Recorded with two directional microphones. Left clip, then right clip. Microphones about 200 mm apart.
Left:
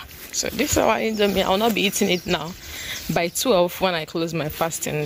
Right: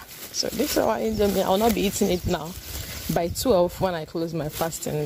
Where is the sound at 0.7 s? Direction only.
5° right (ahead or behind).